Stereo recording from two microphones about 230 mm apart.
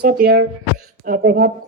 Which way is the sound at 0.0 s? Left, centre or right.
Right.